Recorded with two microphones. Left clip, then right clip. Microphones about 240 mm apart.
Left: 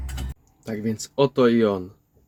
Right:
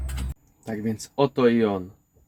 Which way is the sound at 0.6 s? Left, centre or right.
Centre.